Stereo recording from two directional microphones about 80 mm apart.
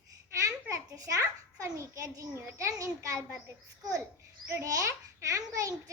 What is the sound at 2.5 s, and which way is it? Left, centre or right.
Speech, right.